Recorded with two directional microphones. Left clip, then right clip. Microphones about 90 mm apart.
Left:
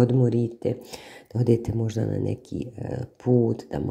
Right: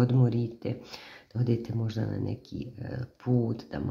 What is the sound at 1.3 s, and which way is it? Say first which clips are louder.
Speech: left 9 dB; 65° left (ahead or behind).